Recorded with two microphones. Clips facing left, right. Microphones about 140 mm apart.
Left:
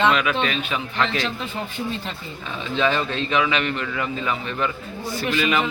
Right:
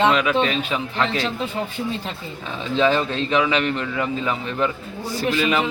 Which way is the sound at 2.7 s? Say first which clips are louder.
Right 3 dB; 35° right (ahead or behind).